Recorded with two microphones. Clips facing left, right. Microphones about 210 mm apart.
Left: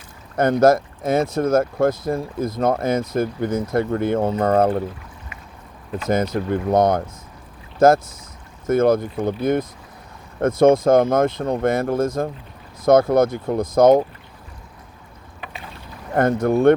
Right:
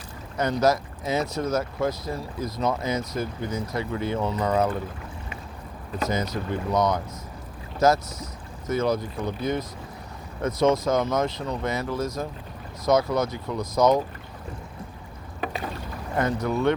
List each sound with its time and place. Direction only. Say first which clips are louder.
0.3 s speech: left 7 dB; 50° left (ahead or behind)
6.1 s speech: left 9 dB; 50° left (ahead or behind)
15.4 s boat: right 7 dB; 45° right (ahead or behind)
16.1 s speech: left 7 dB; 50° left (ahead or behind)